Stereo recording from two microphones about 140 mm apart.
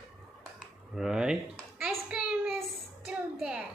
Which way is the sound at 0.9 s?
5° right (ahead or behind).